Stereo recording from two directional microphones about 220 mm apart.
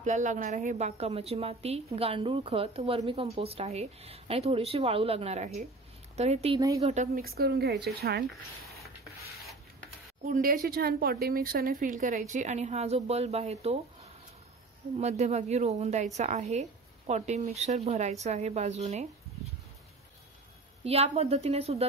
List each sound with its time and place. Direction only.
0.0 s a woman's voice: 35° right (ahead or behind)
7.2 s speech: 45° right (ahead or behind)
10.2 s speech: 40° right (ahead or behind)
15.0 s a woman's voice: 30° right (ahead or behind)
20.8 s a woman's voice: 30° right (ahead or behind)